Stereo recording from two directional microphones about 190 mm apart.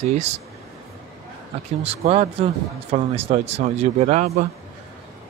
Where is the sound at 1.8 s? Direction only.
35° right (ahead or behind).